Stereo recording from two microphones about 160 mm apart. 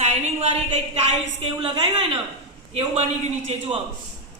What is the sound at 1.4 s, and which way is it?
A woman's voice, 30° right (ahead or behind).